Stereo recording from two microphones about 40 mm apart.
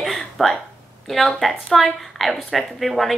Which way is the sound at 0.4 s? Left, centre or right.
Centre.